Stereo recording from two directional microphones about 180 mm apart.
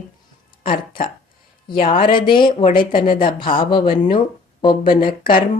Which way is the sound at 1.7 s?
30° left (ahead or behind).